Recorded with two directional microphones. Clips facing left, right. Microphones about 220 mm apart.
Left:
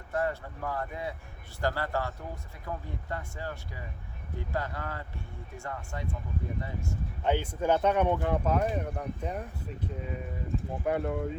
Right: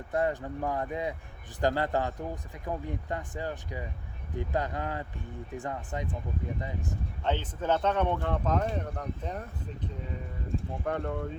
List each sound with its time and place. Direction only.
0.1 s speech: 20° right (ahead or behind)
7.3 s speech: 10° left (ahead or behind)
10.8 s speech: 10° left (ahead or behind)